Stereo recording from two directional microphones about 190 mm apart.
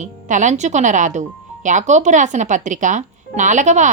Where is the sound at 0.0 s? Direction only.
40° right (ahead or behind).